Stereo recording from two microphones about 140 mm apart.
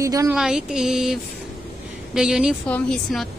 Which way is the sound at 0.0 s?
25° right (ahead or behind).